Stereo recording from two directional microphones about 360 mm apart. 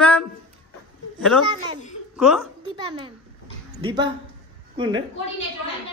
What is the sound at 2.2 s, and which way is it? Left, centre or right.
Speech, centre.